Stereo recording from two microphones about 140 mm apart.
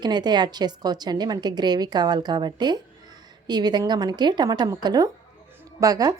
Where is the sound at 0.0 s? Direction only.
30° right (ahead or behind).